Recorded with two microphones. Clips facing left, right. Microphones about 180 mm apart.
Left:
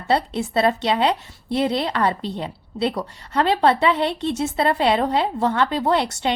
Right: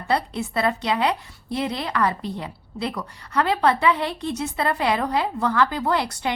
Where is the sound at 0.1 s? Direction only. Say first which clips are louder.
Left 3 dB; 25° left (ahead or behind).